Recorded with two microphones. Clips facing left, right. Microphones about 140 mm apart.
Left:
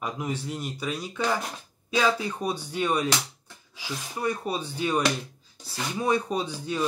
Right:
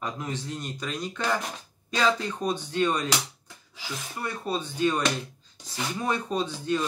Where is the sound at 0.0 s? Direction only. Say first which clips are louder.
Left 2 dB; 10° left (ahead or behind).